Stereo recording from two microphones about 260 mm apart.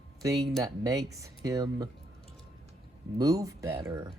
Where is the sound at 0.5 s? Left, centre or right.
Centre.